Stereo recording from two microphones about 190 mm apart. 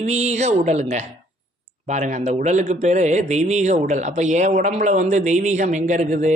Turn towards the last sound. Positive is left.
turn(degrees=-40)  # may be behind; listen again after turning